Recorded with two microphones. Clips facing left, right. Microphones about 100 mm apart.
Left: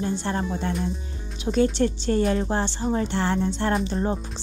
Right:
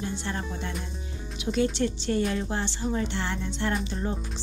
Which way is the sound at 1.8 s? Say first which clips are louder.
Left 4 dB; 40° left (ahead or behind).